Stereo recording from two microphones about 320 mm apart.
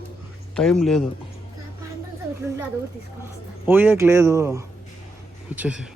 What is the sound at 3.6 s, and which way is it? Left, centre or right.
Speech, centre.